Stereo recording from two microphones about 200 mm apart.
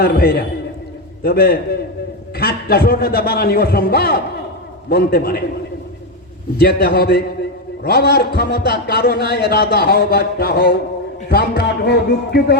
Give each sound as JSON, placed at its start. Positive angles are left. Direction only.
{"t": 0.0, "sound": "a man's voice", "side_deg": 50}
{"t": 6.6, "sound": "a man's voice", "side_deg": 50}